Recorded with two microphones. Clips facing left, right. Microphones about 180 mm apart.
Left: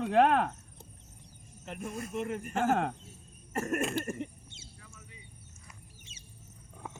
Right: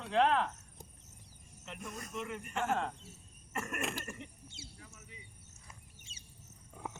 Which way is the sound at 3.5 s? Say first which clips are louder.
Left 9 dB; 40° left (ahead or behind).